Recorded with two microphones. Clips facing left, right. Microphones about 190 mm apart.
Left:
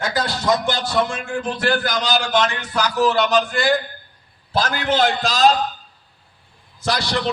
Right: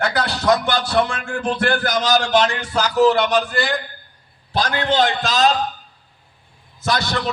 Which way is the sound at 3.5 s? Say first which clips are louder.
Left 3 dB; centre (ahead or behind).